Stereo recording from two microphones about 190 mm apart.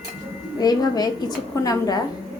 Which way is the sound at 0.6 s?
20° left (ahead or behind).